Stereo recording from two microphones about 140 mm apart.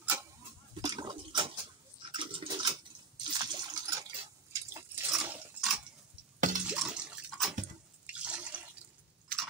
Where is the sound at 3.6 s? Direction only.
25° right (ahead or behind).